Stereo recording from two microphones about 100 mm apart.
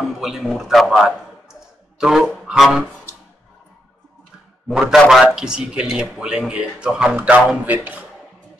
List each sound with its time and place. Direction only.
0.2 s a man's voice: 5° right (ahead or behind)
2.4 s music: 5° right (ahead or behind)
4.6 s a man's voice: centre (ahead or behind)